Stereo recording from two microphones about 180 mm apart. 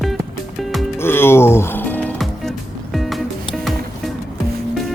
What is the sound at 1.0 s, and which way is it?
Music, 15° left (ahead or behind).